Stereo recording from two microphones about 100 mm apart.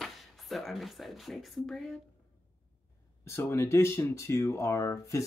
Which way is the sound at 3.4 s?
25° left (ahead or behind).